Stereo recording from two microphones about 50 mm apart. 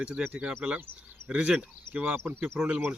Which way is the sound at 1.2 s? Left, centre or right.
Right.